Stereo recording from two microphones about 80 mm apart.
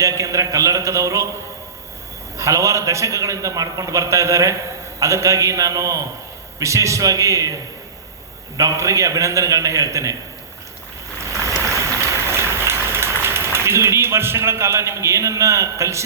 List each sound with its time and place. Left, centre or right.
0.0 s a man's voice: right
2.4 s a man's voice: right
11.2 s boat: right